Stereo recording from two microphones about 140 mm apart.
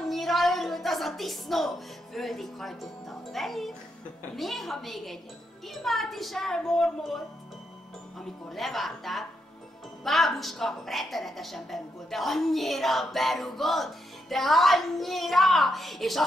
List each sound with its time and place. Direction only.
0.1 s music: centre (ahead or behind)
2.1 s a woman's voice: centre (ahead or behind)
8.5 s a woman's voice: centre (ahead or behind)